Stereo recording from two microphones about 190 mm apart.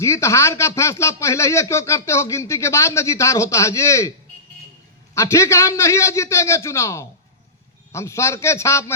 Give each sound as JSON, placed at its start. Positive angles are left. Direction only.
{"t": 0.0, "sound": "speech", "side_deg": 15}
{"t": 5.1, "sound": "speech", "side_deg": 15}